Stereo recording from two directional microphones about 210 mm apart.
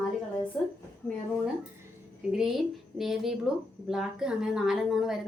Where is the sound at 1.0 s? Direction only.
5° left (ahead or behind).